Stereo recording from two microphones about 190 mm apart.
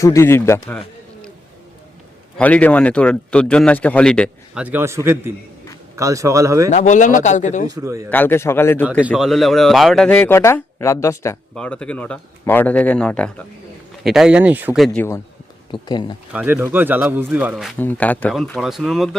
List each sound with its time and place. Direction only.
0.0 s speech: 15° left (ahead or behind)
2.4 s speech: 10° left (ahead or behind)
4.6 s speech: 10° right (ahead or behind)
6.7 s a man's voice: 40° left (ahead or behind)
7.8 s speech: 15° right (ahead or behind)
8.1 s speech: 10° left (ahead or behind)
8.9 s speech: 5° right (ahead or behind)
14.9 s speech: 15° left (ahead or behind)
15.7 s speech: 25° left (ahead or behind)
16.3 s speech: 10° right (ahead or behind)
17.7 s speech: 10° left (ahead or behind)